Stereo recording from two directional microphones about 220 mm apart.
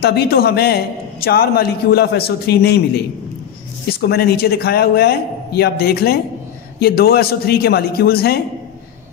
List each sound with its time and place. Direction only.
0.0 s a man's voice: 45° left (ahead or behind)